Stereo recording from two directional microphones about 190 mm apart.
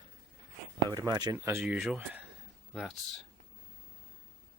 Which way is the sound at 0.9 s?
20° right (ahead or behind).